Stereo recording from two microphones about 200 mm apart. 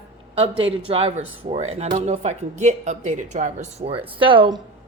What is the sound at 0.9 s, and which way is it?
A woman's voice, 30° right (ahead or behind).